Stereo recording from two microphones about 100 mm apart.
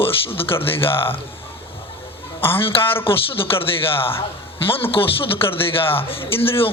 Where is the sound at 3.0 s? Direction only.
65° left (ahead or behind).